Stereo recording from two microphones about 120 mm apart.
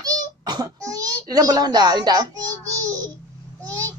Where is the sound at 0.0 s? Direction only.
30° right (ahead or behind).